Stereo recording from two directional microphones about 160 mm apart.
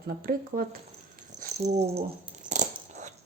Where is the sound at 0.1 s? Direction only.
65° right (ahead or behind).